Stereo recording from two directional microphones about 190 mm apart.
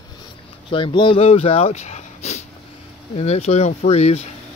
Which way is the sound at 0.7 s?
25° left (ahead or behind).